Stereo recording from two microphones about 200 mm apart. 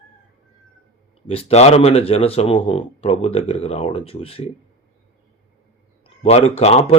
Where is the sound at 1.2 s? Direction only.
30° left (ahead or behind).